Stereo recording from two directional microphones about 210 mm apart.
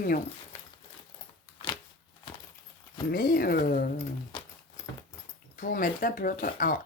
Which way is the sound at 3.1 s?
45° left (ahead or behind).